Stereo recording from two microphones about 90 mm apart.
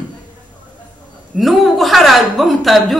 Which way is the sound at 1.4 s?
Centre (ahead or behind).